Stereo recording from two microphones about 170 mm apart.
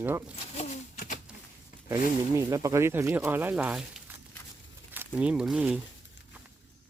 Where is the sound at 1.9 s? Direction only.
20° right (ahead or behind).